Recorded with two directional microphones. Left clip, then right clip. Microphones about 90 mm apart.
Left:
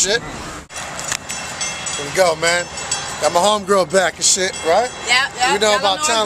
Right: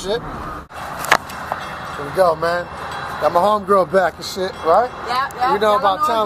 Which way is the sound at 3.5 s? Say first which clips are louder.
Right 1 dB; 50° left (ahead or behind).